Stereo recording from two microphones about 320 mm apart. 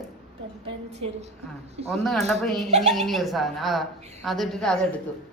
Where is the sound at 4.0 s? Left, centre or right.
Centre.